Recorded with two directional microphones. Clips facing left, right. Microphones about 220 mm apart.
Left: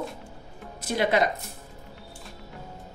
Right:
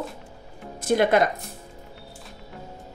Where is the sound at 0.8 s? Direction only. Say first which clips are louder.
Right 4 dB; 50° right (ahead or behind).